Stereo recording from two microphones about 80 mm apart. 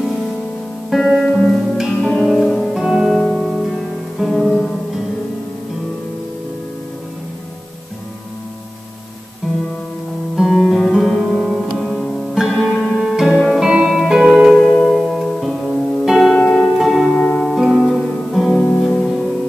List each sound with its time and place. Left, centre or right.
0.8 s music: centre
9.4 s music: centre
12.4 s music: centre
16.3 s music: centre
16.8 s music: centre
17.2 s music: centre
17.6 s music: centre